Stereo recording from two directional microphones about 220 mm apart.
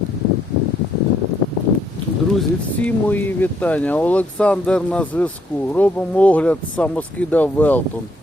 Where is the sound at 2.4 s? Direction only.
5° left (ahead or behind).